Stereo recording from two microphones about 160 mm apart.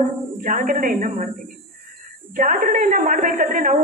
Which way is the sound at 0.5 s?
55° right (ahead or behind).